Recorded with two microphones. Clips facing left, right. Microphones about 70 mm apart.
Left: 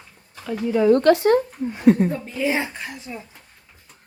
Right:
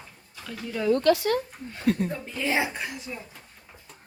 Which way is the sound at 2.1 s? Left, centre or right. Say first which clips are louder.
Left 4 dB; centre.